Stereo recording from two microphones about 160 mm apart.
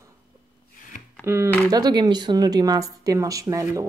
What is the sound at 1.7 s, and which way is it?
A woman's voice, 25° right (ahead or behind).